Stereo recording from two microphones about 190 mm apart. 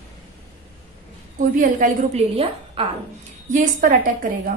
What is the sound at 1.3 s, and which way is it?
A woman's voice, 45° right (ahead or behind).